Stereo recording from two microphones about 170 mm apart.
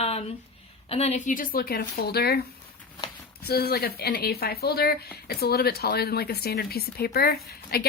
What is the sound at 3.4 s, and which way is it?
Speech, 65° left (ahead or behind).